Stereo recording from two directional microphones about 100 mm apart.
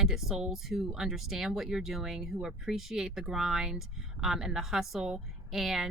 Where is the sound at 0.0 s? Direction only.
5° right (ahead or behind).